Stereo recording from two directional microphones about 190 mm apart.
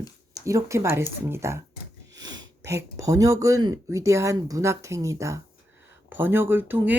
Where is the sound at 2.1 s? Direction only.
20° right (ahead or behind).